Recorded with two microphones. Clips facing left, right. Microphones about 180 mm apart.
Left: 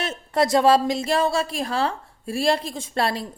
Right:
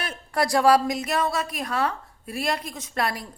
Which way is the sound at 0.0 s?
25° left (ahead or behind).